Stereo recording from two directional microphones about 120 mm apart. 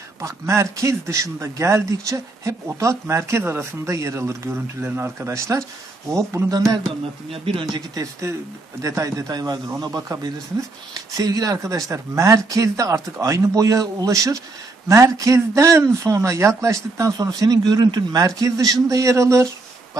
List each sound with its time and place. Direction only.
0.2 s speech: 25° right (ahead or behind)
7.4 s speech: 45° right (ahead or behind)
7.9 s speech: 25° right (ahead or behind)
11.1 s speech: 30° right (ahead or behind)